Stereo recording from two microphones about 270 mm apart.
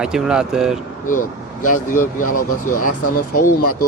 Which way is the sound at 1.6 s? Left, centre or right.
Left.